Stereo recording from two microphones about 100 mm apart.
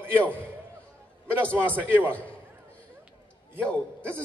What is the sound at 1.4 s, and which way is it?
Speech, 15° left (ahead or behind).